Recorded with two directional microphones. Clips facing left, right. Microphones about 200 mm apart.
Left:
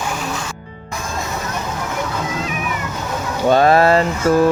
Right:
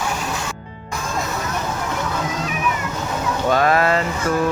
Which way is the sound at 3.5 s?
30° left (ahead or behind).